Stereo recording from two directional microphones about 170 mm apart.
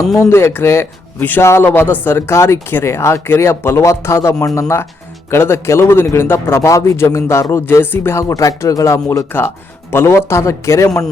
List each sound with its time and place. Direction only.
0.2 s a man's voice: 15° left (ahead or behind)